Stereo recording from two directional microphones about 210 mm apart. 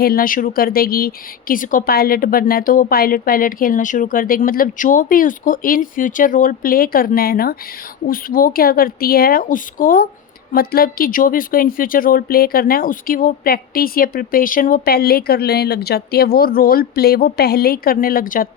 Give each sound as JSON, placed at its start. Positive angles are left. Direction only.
{"t": 0.0, "sound": "speech", "side_deg": 45}